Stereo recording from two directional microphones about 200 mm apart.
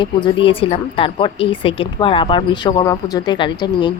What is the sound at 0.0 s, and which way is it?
A woman's voice, 25° left (ahead or behind).